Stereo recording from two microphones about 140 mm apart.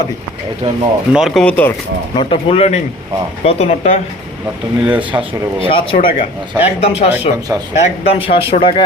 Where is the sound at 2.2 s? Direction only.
40° left (ahead or behind).